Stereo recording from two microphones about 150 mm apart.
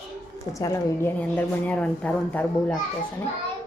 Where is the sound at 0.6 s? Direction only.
20° left (ahead or behind).